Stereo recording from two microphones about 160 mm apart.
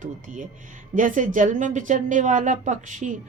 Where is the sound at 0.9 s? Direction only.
55° right (ahead or behind).